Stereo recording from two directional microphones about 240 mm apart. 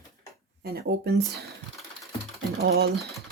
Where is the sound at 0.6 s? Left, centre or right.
Right.